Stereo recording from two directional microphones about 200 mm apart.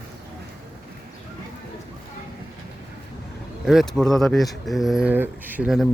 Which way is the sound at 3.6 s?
Centre (ahead or behind).